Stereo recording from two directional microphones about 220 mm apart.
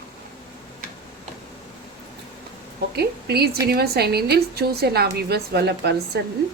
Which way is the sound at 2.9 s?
45° right (ahead or behind).